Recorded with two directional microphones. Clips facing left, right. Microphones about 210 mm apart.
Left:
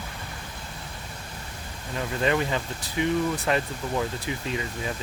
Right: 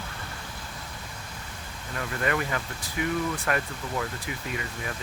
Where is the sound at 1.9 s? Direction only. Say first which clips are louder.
Left 3 dB; 20° left (ahead or behind).